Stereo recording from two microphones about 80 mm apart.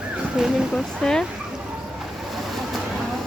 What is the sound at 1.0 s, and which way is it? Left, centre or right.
Speech, centre.